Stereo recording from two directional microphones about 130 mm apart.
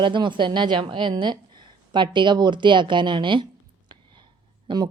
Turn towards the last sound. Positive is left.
turn(degrees=-35)  # may be behind; listen again after turning